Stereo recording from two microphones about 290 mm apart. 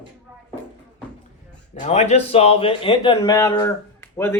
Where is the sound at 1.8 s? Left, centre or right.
Left; by 4.4 s centre.